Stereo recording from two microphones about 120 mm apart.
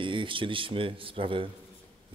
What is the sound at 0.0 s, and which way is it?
Speech, 45° right (ahead or behind).